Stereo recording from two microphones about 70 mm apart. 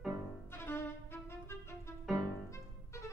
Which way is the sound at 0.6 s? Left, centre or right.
Left.